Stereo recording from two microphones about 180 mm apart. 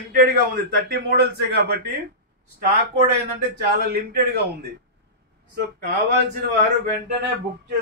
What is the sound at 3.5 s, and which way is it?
A man's voice, 60° right (ahead or behind).